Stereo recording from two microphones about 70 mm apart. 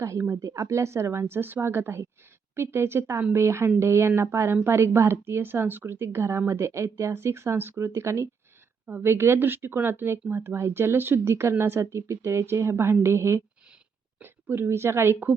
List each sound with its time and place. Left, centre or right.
0.0 s speech: right
8.9 s a woman's voice: right